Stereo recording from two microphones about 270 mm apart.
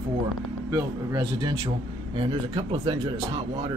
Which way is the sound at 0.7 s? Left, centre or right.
Centre.